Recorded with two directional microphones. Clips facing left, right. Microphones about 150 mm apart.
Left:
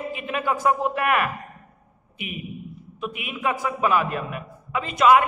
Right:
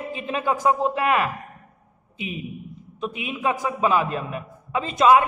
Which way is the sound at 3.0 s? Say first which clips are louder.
Right 2 dB; 30° right (ahead or behind).